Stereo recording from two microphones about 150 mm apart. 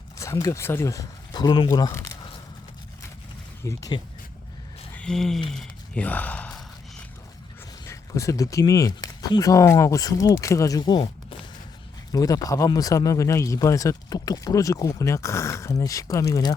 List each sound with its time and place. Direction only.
0.2 s speech: 20° left (ahead or behind)
3.6 s speech: 20° left (ahead or behind)
4.9 s a sound: 5° left (ahead or behind)
5.5 s gasp: 5° left (ahead or behind)
7.9 s speech: 20° left (ahead or behind)
12.1 s speech: 25° left (ahead or behind)